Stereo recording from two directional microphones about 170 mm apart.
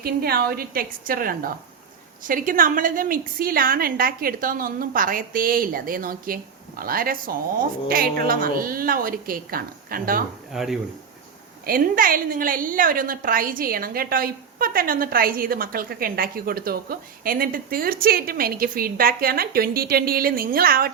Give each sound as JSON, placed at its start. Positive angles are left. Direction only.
{"t": 0.0, "sound": "a woman's voice", "side_deg": -65}
{"t": 10.5, "sound": "speech", "side_deg": 0}
{"t": 11.6, "sound": "a woman's voice", "side_deg": -55}